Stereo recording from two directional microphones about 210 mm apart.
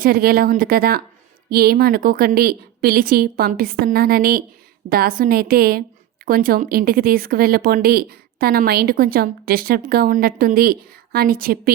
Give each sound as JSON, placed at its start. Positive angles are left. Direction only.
{"t": 0.0, "sound": "speech", "side_deg": -45}